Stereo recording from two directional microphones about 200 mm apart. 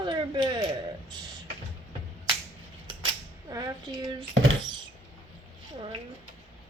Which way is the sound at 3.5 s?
20° right (ahead or behind).